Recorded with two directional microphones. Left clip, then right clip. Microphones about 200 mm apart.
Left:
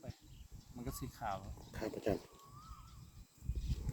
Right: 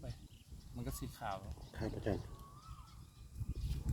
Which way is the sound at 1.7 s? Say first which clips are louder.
Left 2 dB; 20° left (ahead or behind).